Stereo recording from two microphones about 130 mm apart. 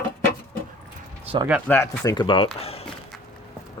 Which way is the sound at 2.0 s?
35° left (ahead or behind).